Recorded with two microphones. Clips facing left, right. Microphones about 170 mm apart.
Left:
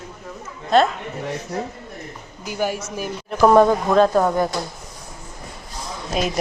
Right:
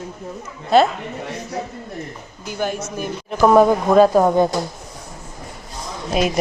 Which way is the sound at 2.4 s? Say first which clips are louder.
Even; 10° left (ahead or behind).